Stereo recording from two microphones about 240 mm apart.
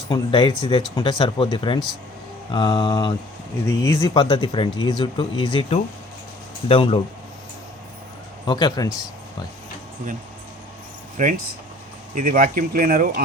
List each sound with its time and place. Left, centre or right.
0.1 s speech: left
8.4 s speech: centre
11.2 s speech: right